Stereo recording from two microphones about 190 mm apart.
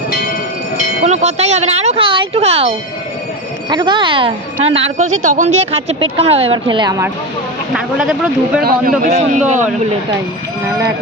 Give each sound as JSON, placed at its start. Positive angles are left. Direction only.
{"t": 1.0, "sound": "speech", "side_deg": -35}
{"t": 7.7, "sound": "speech", "side_deg": -5}
{"t": 8.6, "sound": "a man's voice", "side_deg": -45}